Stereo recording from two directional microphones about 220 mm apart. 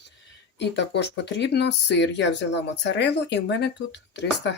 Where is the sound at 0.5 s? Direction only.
50° left (ahead or behind).